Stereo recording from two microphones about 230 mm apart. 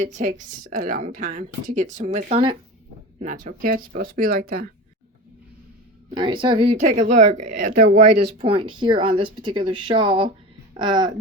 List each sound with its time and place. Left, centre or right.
0.0 s a woman's voice: right
3.2 s a woman's voice: right
6.1 s a woman's voice: right
7.9 s speech: right